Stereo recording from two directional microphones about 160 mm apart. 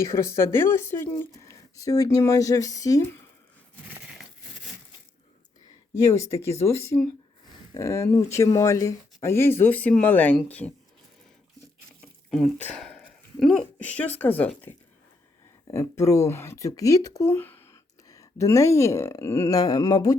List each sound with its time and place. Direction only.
0.0 s speech: 15° left (ahead or behind)
6.1 s speech: 20° left (ahead or behind)
12.3 s speech: 5° left (ahead or behind); by 20.1 s 20° left (ahead or behind)